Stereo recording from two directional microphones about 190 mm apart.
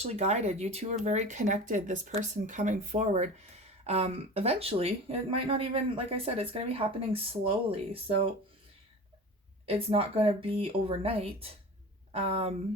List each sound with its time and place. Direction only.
0.0 s speech: 35° right (ahead or behind)
9.6 s speech: 30° right (ahead or behind)